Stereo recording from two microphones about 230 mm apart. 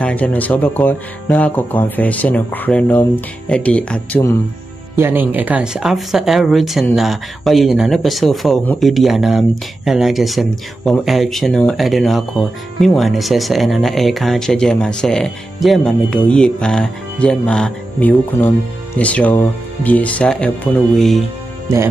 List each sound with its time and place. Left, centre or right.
0.0 s speech: centre
4.9 s speech: centre